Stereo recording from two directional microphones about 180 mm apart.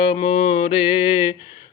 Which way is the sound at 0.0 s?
30° left (ahead or behind).